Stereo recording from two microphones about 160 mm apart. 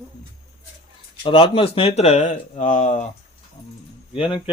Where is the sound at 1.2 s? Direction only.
35° left (ahead or behind); by 3.0 s 50° left (ahead or behind).